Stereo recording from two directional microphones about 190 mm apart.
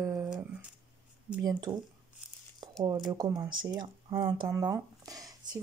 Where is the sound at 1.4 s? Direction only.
20° right (ahead or behind).